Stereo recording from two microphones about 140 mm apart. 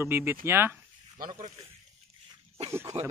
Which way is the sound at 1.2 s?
65° right (ahead or behind).